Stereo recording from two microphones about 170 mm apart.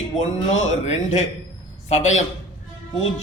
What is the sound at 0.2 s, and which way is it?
A man's voice, 45° left (ahead or behind).